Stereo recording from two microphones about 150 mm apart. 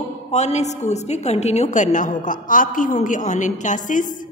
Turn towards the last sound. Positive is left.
turn(degrees=60)  # may be behind; listen again after turning